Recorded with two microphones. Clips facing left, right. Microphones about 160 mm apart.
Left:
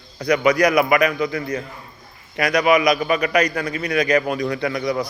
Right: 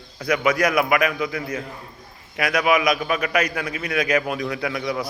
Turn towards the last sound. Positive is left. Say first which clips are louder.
# left 3 dB
turn(degrees=-5)  # may be behind; listen again after turning